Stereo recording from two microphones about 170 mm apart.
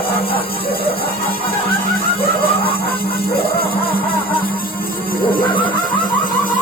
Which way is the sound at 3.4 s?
65° left (ahead or behind).